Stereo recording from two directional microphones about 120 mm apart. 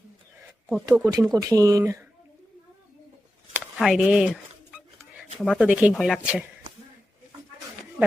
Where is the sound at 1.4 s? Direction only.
30° right (ahead or behind).